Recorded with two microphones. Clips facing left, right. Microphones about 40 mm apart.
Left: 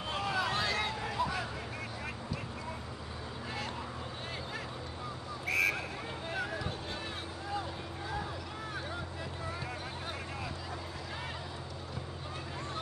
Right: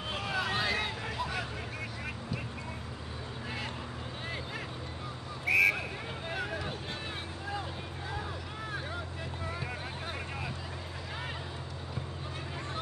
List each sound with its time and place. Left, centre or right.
0.1 s vehicle: centre
5.4 s a sound: centre
6.3 s vehicle: centre